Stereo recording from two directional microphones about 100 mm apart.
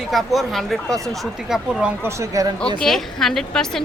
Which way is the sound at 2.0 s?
35° right (ahead or behind).